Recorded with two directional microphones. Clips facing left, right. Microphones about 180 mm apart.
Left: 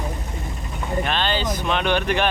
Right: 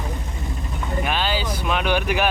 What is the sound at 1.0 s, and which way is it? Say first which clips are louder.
Speech: left 1 dB; 10° right (ahead or behind).